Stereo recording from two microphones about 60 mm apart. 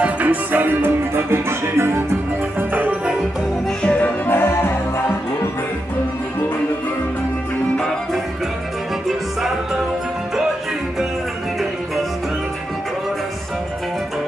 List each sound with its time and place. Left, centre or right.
0.0 s music: right
2.7 s music: right
3.8 s music: left
4.3 s music: left
7.7 s music: centre